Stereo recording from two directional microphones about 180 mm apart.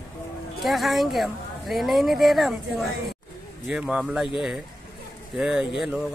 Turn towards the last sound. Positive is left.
turn(degrees=0)  # may be behind; listen again after turning